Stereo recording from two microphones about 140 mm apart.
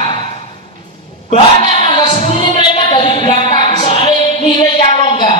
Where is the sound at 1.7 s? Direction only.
35° left (ahead or behind).